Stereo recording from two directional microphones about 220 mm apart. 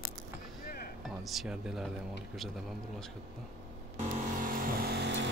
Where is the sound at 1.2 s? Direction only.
Centre (ahead or behind).